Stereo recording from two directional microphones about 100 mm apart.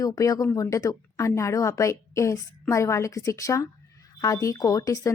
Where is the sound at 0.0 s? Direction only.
35° left (ahead or behind).